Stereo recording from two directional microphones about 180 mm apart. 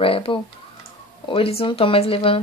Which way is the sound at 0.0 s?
30° left (ahead or behind).